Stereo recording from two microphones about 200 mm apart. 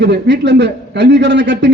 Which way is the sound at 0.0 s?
60° right (ahead or behind).